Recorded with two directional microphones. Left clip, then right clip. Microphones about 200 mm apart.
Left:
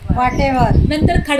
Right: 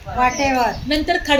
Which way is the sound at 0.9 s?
5° left (ahead or behind).